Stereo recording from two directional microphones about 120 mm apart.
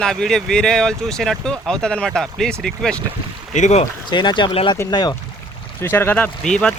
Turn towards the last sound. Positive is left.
turn(degrees=5)  # may be behind; listen again after turning